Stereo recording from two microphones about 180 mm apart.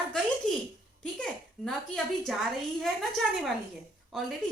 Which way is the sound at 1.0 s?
5° left (ahead or behind).